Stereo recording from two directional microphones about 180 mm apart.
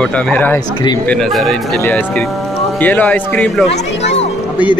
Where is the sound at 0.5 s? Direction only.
20° left (ahead or behind).